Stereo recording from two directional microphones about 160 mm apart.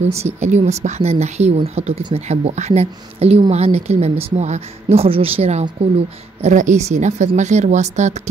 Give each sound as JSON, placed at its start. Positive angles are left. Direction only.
{"t": 0.1, "sound": "a woman's voice", "side_deg": -45}